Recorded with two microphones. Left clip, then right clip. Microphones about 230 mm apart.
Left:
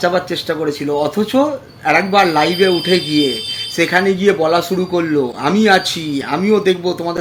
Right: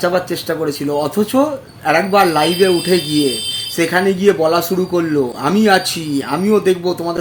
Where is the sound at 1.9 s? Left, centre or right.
Centre.